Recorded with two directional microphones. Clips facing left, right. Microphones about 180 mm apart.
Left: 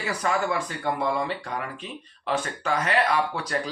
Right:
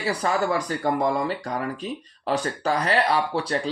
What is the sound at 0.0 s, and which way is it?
Speech, 30° right (ahead or behind).